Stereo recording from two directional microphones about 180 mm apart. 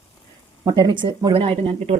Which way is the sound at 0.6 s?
20° right (ahead or behind).